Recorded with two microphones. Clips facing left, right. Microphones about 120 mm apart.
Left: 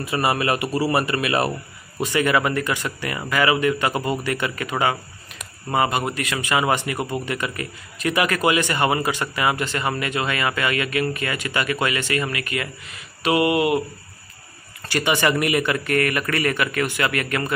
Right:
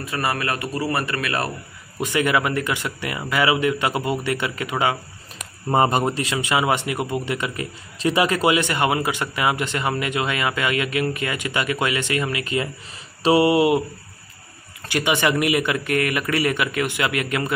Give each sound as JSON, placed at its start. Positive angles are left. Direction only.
{"t": 0.2, "sound": "speech", "side_deg": 15}
{"t": 2.0, "sound": "speech", "side_deg": -15}
{"t": 5.7, "sound": "speech", "side_deg": -40}
{"t": 6.3, "sound": "speech", "side_deg": -15}
{"t": 13.2, "sound": "speech", "side_deg": -30}
{"t": 14.9, "sound": "speech", "side_deg": -15}